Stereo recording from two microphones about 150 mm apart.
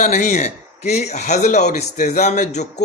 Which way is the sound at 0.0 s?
50° left (ahead or behind).